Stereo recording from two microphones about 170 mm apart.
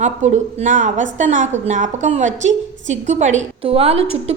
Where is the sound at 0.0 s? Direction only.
45° right (ahead or behind).